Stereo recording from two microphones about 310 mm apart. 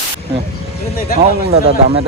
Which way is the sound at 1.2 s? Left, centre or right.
Right.